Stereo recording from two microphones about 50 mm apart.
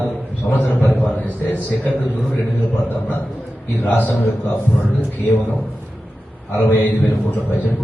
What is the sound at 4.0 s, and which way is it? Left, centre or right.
Speech, left.